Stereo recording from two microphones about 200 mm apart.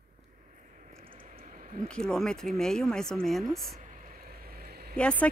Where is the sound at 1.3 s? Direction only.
40° right (ahead or behind).